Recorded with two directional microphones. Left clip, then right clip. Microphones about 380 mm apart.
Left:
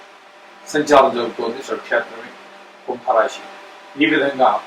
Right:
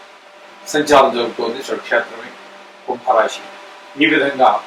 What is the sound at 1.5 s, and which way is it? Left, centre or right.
A man's voice, centre.